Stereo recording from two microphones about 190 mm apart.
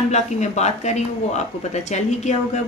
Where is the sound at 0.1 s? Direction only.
35° left (ahead or behind).